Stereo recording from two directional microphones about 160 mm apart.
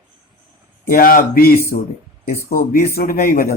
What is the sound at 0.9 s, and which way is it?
Speech, 65° left (ahead or behind).